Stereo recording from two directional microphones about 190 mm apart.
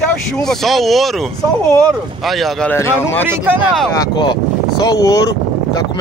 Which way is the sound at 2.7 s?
15° left (ahead or behind).